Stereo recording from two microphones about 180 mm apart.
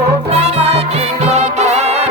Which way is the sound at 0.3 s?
35° right (ahead or behind).